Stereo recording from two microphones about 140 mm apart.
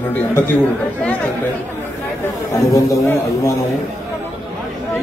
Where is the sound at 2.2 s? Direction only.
20° left (ahead or behind).